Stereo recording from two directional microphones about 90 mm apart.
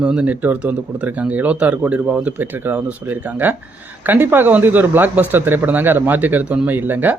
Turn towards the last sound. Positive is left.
turn(degrees=-20)  # may be behind; listen again after turning